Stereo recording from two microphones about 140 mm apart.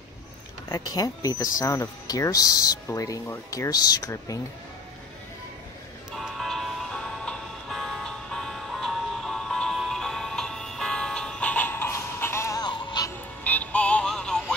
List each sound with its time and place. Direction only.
0.7 s speech: 25° left (ahead or behind)
6.1 s music: centre (ahead or behind); by 13.1 s 30° left (ahead or behind)
13.1 s music: 10° left (ahead or behind)